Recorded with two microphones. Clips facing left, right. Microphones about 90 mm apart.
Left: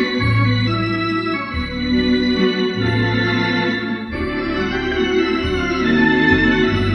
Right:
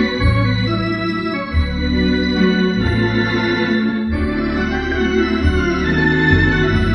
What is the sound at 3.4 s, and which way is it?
Organ, 5° right (ahead or behind).